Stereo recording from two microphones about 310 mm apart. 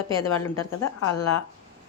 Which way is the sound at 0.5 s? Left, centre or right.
Left.